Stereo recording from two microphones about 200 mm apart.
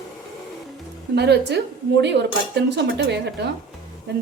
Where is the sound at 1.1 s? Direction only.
55° right (ahead or behind).